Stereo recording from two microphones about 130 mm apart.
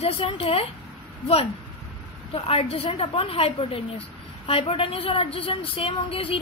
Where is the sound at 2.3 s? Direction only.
50° left (ahead or behind).